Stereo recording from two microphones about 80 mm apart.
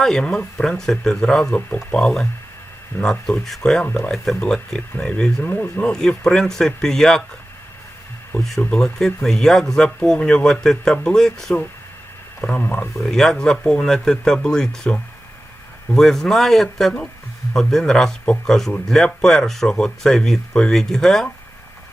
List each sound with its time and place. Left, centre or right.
0.0 s speech: centre
3.8 s speech: left
4.1 s speech: centre; by 5.6 s left
5.9 s speech: centre
8.7 s speech: centre
12.4 s speech: left
13.0 s speech: centre